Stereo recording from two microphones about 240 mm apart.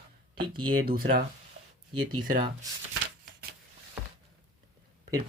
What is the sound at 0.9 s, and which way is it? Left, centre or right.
Speech, right.